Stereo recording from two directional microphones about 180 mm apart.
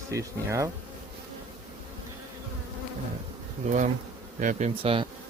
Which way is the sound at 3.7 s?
40° right (ahead or behind).